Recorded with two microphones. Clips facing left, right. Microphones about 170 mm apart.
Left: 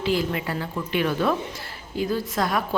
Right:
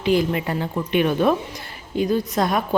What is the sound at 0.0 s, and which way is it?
A woman's voice, 20° right (ahead or behind).